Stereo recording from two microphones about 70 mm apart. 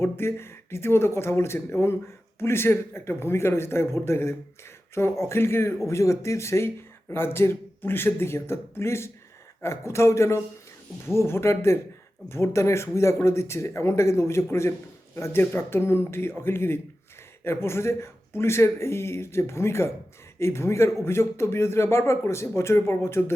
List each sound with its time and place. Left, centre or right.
0.0 s speech: left
5.9 s speech: left